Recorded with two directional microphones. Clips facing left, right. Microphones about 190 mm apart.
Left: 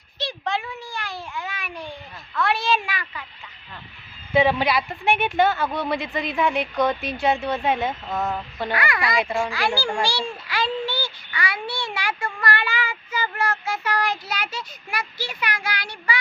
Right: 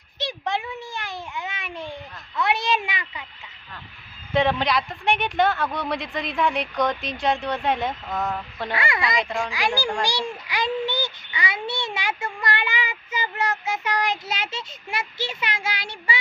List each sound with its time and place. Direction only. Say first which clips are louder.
0.2 s a sound: even; 20° right (ahead or behind)
4.4 s speech: left 2 dB; 5° left (ahead or behind)
8.7 s a child's voice: left 1 dB; 25° right (ahead or behind)
9.1 s a child's voice: left 2 dB; 5° left (ahead or behind)
9.5 s a child's voice: left 1 dB; 15° right (ahead or behind)